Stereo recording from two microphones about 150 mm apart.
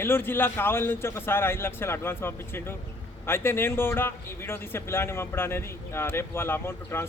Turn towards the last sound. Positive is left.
turn(degrees=15)  # may be behind; listen again after turning